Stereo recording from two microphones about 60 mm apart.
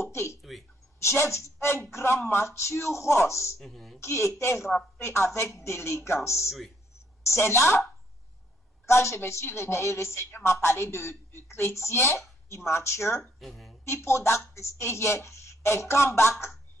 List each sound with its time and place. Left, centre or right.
0.0 s a sound: left
0.4 s a sound: centre
1.0 s a woman's voice: left
3.5 s speech: centre
4.0 s a woman's voice: left
8.8 s a woman's voice: left
13.4 s a woman's voice: centre
14.0 s a woman's voice: left